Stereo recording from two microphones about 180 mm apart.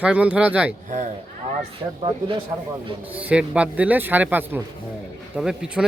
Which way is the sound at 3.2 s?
5° right (ahead or behind).